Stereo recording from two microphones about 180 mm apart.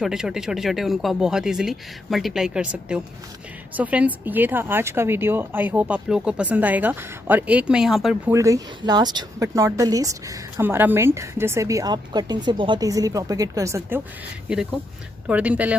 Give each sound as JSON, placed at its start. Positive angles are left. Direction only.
{"t": 0.0, "sound": "speech", "side_deg": -5}
{"t": 8.3, "sound": "speech", "side_deg": -15}